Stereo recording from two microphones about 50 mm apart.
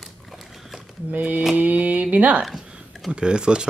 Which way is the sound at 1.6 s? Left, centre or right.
Right.